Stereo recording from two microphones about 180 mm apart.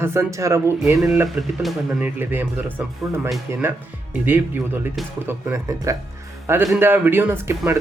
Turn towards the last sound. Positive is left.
turn(degrees=-15)  # may be behind; listen again after turning